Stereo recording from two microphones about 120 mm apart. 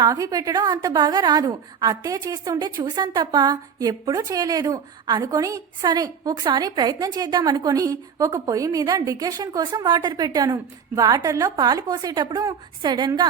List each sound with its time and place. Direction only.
0.0 s a woman's voice: 30° right (ahead or behind)